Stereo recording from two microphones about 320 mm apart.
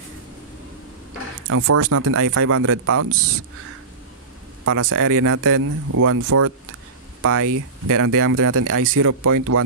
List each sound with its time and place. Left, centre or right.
1.5 s speech: right
4.6 s speech: right